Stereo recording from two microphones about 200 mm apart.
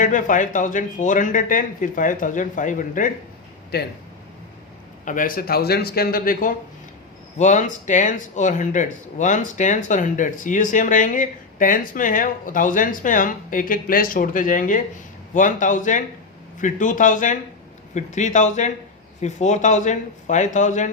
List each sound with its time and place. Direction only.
0.0 s speech: 40° left (ahead or behind)
3.7 s speech: 55° left (ahead or behind)
5.0 s speech: 40° left (ahead or behind)